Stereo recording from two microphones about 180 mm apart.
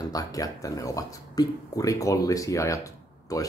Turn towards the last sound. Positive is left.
turn(degrees=20)  # may be behind; listen again after turning